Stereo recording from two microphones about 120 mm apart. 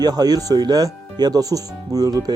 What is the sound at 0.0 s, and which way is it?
Speech, 35° right (ahead or behind).